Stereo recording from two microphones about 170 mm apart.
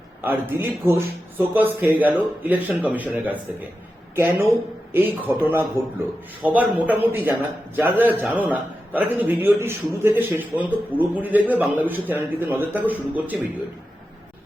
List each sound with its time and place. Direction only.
0.2 s a man's voice: 10° right (ahead or behind)